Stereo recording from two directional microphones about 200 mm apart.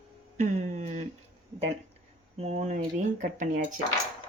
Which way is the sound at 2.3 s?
35° right (ahead or behind).